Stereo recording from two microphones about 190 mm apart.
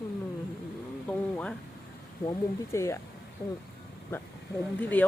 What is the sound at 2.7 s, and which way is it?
Speech, 15° left (ahead or behind).